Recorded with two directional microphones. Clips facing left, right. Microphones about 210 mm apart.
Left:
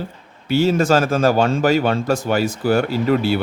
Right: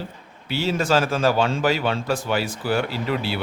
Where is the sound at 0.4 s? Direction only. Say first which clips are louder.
Left 7 dB; 45° left (ahead or behind).